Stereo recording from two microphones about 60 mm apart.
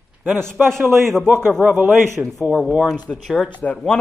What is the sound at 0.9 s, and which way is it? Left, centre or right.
Speech, centre.